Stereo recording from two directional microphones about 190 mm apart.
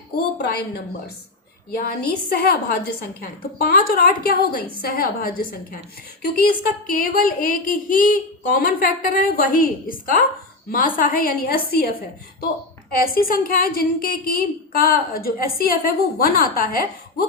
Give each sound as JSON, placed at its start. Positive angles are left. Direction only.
{"t": 1.9, "sound": "speech", "side_deg": 55}